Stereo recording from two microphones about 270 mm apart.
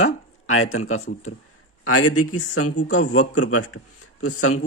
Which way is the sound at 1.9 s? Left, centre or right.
Left.